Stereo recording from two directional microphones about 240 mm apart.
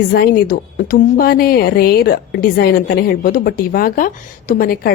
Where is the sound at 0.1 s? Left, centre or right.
Left.